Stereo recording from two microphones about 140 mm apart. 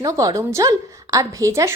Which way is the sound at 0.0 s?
25° right (ahead or behind).